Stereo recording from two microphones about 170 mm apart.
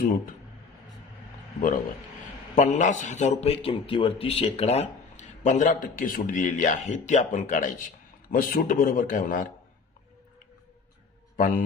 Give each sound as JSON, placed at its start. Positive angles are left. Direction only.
{"t": 2.5, "sound": "speech", "side_deg": 45}
{"t": 3.4, "sound": "speech", "side_deg": 35}
{"t": 11.3, "sound": "a man's voice", "side_deg": 55}